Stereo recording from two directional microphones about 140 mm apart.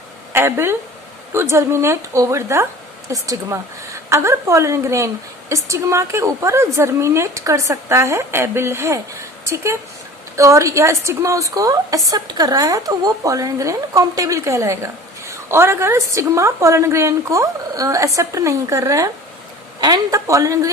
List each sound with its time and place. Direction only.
0.3 s a woman's voice: 15° right (ahead or behind)
10.3 s a woman's voice: 20° right (ahead or behind)